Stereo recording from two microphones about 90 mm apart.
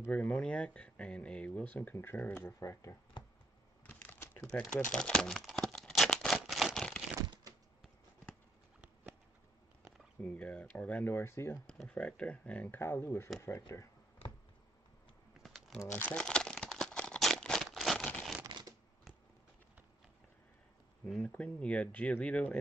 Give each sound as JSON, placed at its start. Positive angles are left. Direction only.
{"t": 0.1, "sound": "speech", "side_deg": 10}
{"t": 3.8, "sound": "a sound", "side_deg": 20}
{"t": 4.6, "sound": "tearing", "side_deg": 15}
{"t": 10.2, "sound": "speech", "side_deg": 15}
{"t": 11.9, "sound": "speech", "side_deg": 15}
{"t": 15.4, "sound": "crumpling", "side_deg": 0}
{"t": 15.9, "sound": "speech", "side_deg": 20}
{"t": 16.2, "sound": "crumpling", "side_deg": 10}
{"t": 21.2, "sound": "speech", "side_deg": 15}